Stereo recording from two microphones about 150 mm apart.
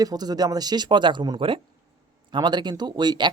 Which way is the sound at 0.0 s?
25° right (ahead or behind).